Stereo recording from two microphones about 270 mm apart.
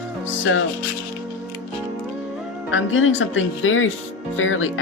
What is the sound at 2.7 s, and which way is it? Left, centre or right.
Speech, left.